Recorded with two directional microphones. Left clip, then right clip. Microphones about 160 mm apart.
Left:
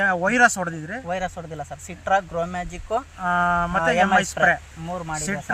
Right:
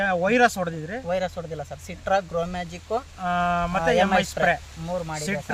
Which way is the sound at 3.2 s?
30° right (ahead or behind).